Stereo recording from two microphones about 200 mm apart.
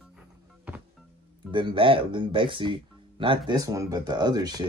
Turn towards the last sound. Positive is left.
turn(degrees=-20)  # may be behind; listen again after turning